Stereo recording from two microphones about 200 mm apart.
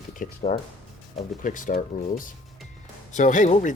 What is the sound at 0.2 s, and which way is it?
Speech, 35° left (ahead or behind).